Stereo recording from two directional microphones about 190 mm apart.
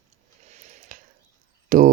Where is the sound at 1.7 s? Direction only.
45° right (ahead or behind).